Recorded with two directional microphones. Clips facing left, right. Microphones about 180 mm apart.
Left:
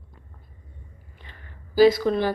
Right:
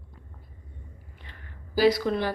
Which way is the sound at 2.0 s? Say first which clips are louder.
Left 4 dB; 35° left (ahead or behind).